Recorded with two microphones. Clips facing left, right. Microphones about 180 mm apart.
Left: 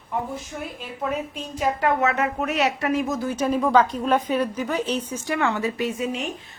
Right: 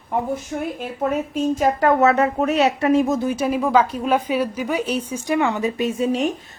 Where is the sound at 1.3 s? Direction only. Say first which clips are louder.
Right 7 dB; 45° right (ahead or behind); by 3.2 s 30° right (ahead or behind).